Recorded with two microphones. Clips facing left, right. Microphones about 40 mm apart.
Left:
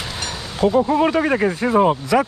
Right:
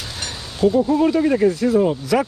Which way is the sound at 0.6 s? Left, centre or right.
Left.